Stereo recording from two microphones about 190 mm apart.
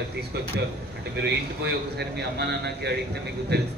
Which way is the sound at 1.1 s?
60° right (ahead or behind).